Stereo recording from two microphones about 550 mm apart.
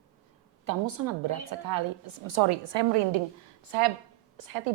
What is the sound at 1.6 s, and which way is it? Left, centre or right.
Speech, right.